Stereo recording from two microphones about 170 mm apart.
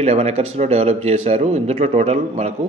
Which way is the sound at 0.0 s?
40° right (ahead or behind).